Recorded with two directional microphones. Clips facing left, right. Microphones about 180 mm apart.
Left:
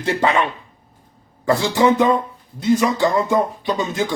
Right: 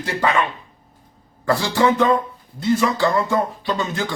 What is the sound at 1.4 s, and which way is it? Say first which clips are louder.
A man's voice: left 2 dB; 20° left (ahead or behind).